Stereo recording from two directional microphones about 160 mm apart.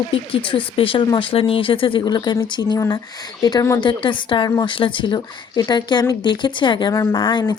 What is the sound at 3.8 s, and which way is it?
Speech, 30° left (ahead or behind).